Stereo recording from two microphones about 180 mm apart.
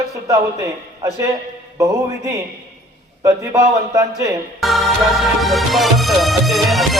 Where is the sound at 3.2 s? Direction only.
20° right (ahead or behind).